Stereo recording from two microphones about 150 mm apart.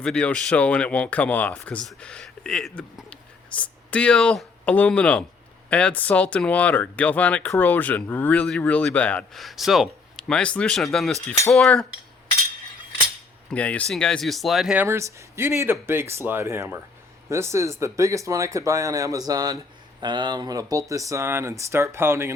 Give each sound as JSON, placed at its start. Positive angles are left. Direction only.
{"t": 0.0, "sound": "speech", "side_deg": 5}
{"t": 13.5, "sound": "speech", "side_deg": 10}
{"t": 14.8, "sound": "speech", "side_deg": -20}